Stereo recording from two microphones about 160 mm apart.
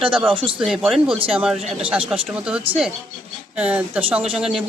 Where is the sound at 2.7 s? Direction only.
35° right (ahead or behind).